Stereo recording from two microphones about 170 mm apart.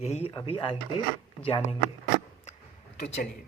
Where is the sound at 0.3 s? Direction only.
30° left (ahead or behind).